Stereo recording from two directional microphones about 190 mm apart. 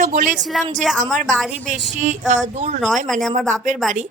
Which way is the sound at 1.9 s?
40° right (ahead or behind).